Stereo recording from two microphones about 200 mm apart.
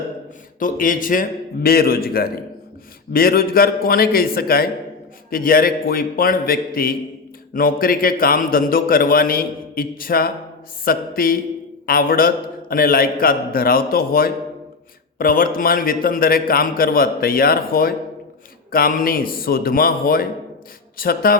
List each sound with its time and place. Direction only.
0.6 s a man's voice: 45° left (ahead or behind)